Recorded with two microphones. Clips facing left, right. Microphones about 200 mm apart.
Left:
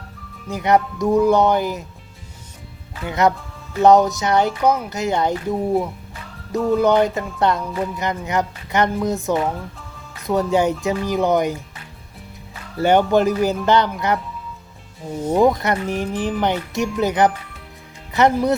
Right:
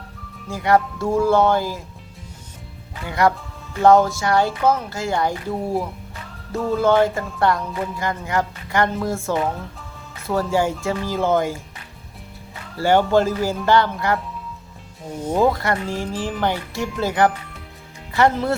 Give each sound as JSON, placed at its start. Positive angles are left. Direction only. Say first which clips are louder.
{"t": 0.4, "sound": "speech", "louder": "left 1 dB", "side_deg": 20}
{"t": 3.1, "sound": "speech", "louder": "left 1 dB", "side_deg": 20}
{"t": 5.5, "sound": "speech", "louder": "left 5 dB", "side_deg": 0}
{"t": 6.7, "sound": "speech", "louder": "left 1 dB", "side_deg": 15}
{"t": 12.8, "sound": "speech", "louder": "left 1 dB", "side_deg": 20}
{"t": 15.1, "sound": "speech", "louder": "left 3 dB", "side_deg": 10}